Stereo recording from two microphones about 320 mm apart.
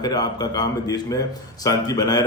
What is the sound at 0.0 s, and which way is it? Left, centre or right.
A man's voice, centre.